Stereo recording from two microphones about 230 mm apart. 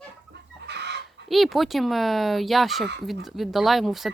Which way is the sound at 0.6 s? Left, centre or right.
Right.